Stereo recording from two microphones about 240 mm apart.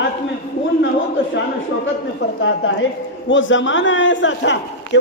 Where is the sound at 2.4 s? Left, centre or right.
Left.